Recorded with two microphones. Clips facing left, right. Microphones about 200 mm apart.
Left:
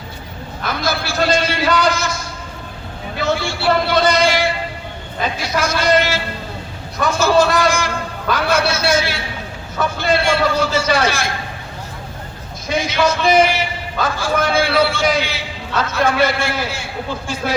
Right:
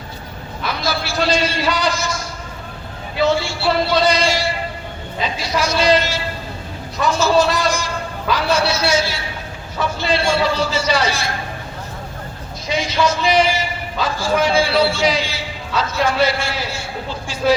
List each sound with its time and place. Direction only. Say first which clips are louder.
0.6 s a sound: left 1 dB; 50° left (ahead or behind)
7.0 s a man's voice: left 1 dB; 55° left (ahead or behind)
12.6 s a man's voice: left 1 dB; 55° left (ahead or behind)